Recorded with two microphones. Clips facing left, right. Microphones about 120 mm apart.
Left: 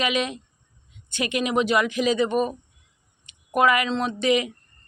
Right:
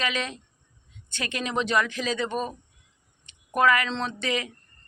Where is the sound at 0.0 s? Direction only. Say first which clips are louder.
Left 5 dB; 15° left (ahead or behind).